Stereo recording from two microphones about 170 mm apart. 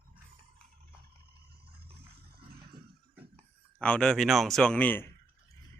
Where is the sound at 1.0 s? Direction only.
70° right (ahead or behind).